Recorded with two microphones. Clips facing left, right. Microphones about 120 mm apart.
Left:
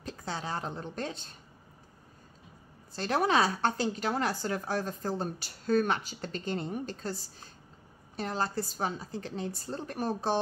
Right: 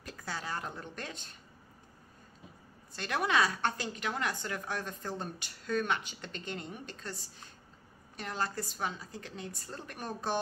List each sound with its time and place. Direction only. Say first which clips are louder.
0.0 s a woman's voice: left 4 dB; 25° left (ahead or behind)
2.9 s a woman's voice: left 4 dB; 35° left (ahead or behind)